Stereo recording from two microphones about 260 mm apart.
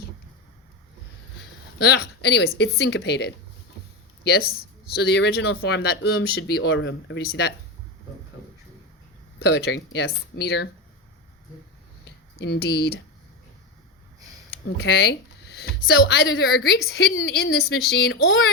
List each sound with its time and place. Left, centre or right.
1.8 s speech: left
9.5 s speech: left
12.0 s a sound: left
14.8 s speech: left